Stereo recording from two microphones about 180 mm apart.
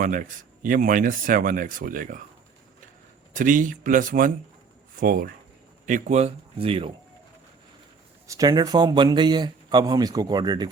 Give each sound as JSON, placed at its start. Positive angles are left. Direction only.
{"t": 0.0, "sound": "speech", "side_deg": -45}
{"t": 3.3, "sound": "speech", "side_deg": -45}
{"t": 8.3, "sound": "speech", "side_deg": -20}